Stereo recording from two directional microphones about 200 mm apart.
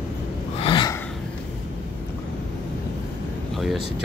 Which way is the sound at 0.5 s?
25° left (ahead or behind).